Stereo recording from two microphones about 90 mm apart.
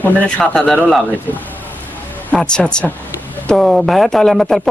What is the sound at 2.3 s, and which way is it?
Speech, 10° left (ahead or behind).